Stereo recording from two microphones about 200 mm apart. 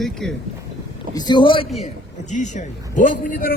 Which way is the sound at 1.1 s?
20° left (ahead or behind).